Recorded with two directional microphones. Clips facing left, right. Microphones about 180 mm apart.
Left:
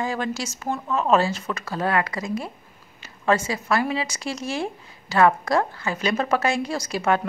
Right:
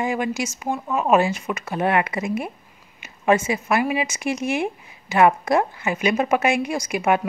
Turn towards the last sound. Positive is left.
turn(degrees=-15)  # may be behind; listen again after turning